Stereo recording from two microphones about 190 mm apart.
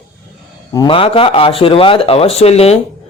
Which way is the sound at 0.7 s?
25° left (ahead or behind).